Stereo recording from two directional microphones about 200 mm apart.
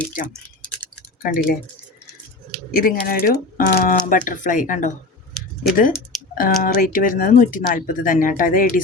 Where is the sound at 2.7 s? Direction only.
45° left (ahead or behind).